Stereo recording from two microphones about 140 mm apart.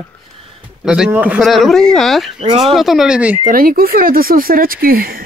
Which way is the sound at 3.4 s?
85° right.